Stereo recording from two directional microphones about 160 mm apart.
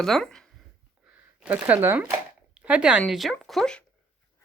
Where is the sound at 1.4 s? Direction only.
10° right (ahead or behind).